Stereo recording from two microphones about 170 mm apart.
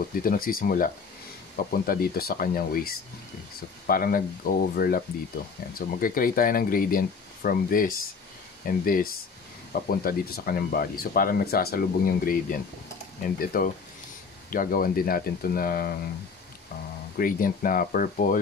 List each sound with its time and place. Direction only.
0.1 s speech: 55° left (ahead or behind)
17.2 s speech: 55° left (ahead or behind)